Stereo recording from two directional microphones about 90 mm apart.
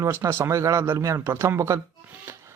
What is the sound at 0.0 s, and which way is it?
Speech, 30° right (ahead or behind).